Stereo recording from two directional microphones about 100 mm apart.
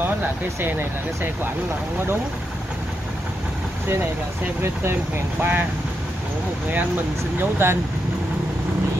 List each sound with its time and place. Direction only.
0.6 s speech: 20° right (ahead or behind)
4.6 s speech: 20° right (ahead or behind)
7.3 s speech: 20° right (ahead or behind)